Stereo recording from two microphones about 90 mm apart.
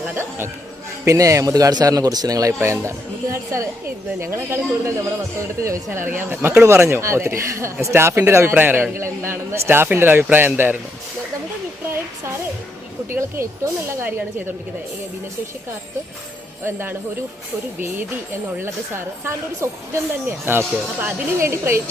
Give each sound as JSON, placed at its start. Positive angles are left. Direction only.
{"t": 0.0, "sound": "a woman's voice", "side_deg": -25}
{"t": 1.0, "sound": "speech", "side_deg": -35}
{"t": 2.6, "sound": "a woman's voice", "side_deg": -30}
{"t": 6.9, "sound": "speech", "side_deg": -30}
{"t": 8.5, "sound": "a woman's voice", "side_deg": -20}
{"t": 13.1, "sound": "a woman's voice", "side_deg": -30}
{"t": 19.2, "sound": "a woman's voice", "side_deg": -30}